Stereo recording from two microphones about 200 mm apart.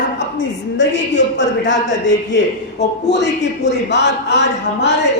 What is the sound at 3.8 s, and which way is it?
A man's voice, 60° left (ahead or behind).